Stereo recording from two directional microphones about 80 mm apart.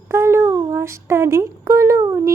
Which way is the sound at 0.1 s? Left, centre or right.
Right.